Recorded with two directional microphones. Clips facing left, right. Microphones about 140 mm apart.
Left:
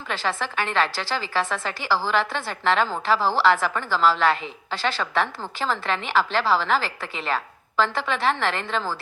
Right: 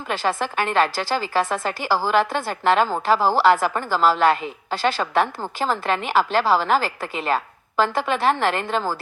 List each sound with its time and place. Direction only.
0.1 s a woman's voice: 45° right (ahead or behind)